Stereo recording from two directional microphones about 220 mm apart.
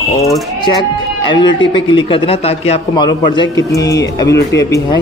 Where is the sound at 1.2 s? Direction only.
20° left (ahead or behind).